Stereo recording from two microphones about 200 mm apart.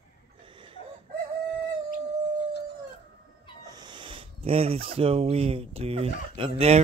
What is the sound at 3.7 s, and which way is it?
Speech, 20° right (ahead or behind).